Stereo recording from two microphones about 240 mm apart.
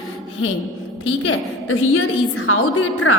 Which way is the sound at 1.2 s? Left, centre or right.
Left.